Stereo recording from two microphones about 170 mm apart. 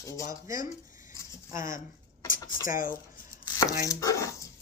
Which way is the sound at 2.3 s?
55° left (ahead or behind).